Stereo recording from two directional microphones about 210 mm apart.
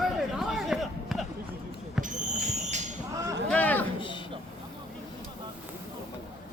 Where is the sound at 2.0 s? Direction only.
35° right (ahead or behind).